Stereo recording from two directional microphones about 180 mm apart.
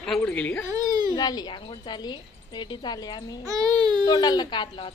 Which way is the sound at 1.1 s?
20° left (ahead or behind).